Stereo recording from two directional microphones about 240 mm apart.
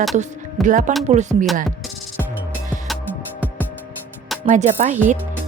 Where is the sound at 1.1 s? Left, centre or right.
Right.